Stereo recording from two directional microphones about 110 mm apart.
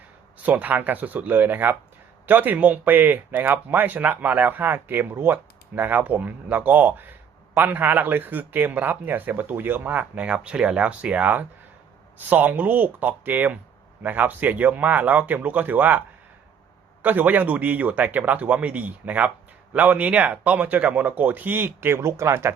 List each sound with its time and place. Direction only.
0.3 s speech: 15° right (ahead or behind)